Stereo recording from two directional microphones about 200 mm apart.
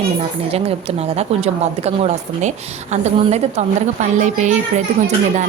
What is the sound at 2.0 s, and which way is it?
A woman's voice, 35° right (ahead or behind).